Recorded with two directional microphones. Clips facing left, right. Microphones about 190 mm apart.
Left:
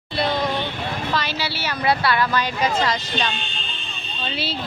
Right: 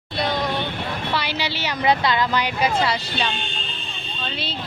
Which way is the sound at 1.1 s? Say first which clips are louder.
Even; 15° right (ahead or behind).